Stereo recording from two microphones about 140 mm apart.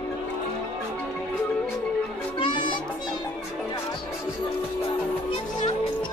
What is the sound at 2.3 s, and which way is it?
Music, 35° left (ahead or behind).